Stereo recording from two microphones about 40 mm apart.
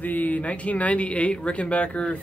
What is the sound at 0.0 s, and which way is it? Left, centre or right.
Speech, left.